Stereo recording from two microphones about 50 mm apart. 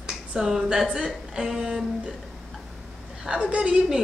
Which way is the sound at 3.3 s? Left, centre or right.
Right.